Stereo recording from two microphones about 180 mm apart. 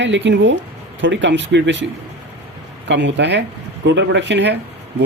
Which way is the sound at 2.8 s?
80° right.